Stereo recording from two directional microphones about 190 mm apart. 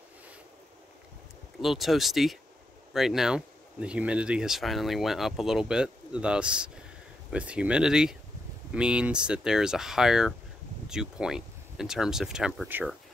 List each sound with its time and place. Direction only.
1.6 s speech: centre (ahead or behind)